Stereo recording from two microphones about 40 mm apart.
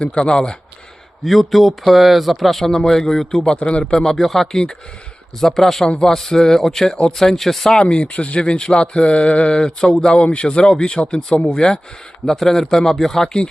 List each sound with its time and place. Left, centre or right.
0.0 s speech: left
1.2 s speech: centre
7.7 s speech: left